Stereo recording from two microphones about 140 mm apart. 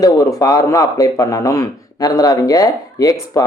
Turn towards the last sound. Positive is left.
turn(degrees=25)  # may be behind; listen again after turning